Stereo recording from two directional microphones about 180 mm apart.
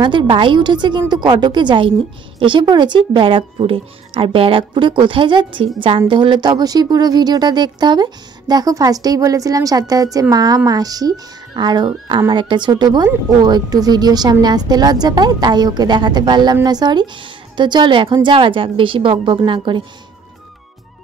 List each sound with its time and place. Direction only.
0.0 s speech: 25° right (ahead or behind)